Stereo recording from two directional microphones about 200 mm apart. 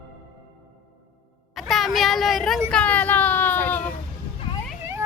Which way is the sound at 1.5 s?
Centre (ahead or behind).